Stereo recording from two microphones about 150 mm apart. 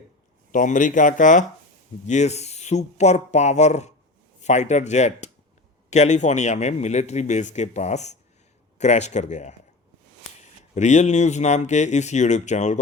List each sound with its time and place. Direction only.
0.5 s speech: 60° left (ahead or behind)
10.8 s speech: 50° left (ahead or behind)